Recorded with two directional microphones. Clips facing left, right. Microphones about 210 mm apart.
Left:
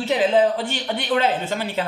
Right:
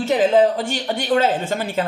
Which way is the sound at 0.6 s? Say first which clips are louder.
Right 2 dB; 45° right (ahead or behind).